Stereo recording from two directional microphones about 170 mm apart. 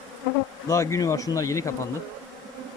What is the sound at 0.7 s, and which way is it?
Speech, 20° left (ahead or behind).